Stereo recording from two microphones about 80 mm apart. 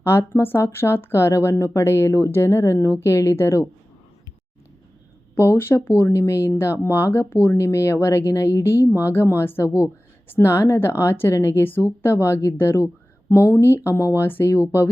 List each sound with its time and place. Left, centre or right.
0.0 s speech: left
5.5 s speech: left